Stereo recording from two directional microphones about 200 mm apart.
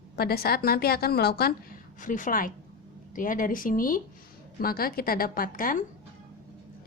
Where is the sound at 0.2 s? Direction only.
50° left (ahead or behind).